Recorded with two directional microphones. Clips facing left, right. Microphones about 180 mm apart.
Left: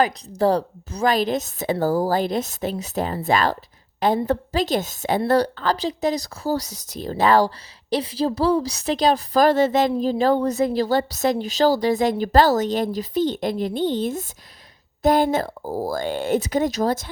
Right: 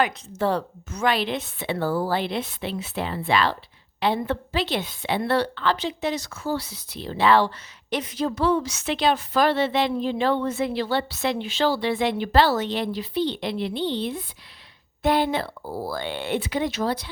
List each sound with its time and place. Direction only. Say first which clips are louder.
0.0 s a woman's voice: left 4 dB; 35° left (ahead or behind)